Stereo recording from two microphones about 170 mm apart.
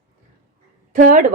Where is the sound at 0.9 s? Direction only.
55° right (ahead or behind).